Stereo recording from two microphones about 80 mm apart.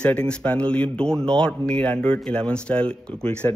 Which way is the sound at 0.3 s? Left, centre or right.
Centre.